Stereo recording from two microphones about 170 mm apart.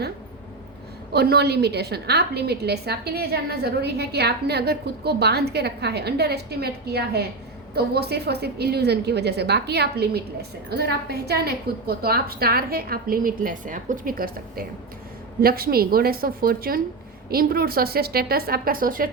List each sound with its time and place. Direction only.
1.1 s a woman's voice: 70° right (ahead or behind); by 19.1 s 55° right (ahead or behind)